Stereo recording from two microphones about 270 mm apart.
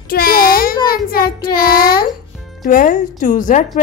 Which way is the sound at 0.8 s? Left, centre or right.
Left.